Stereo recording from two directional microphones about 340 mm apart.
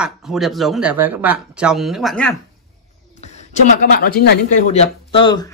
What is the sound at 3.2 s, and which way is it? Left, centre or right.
Speech, centre.